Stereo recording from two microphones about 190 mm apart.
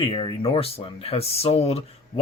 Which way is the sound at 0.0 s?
25° left (ahead or behind).